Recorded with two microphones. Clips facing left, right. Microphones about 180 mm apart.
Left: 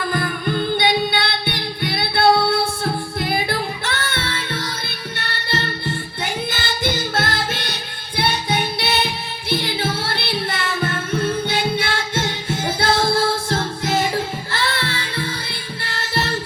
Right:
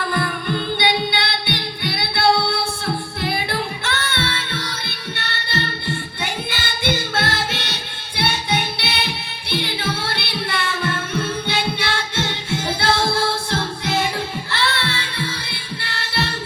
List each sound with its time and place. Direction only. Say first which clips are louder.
0.1 s music: left 1 dB; 45° left (ahead or behind)
3.8 s music: right 1 dB; 45° left (ahead or behind)
6.5 s music: even; 45° left (ahead or behind)